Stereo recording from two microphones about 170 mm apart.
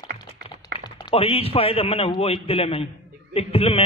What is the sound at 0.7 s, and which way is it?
A man's voice, 25° left (ahead or behind).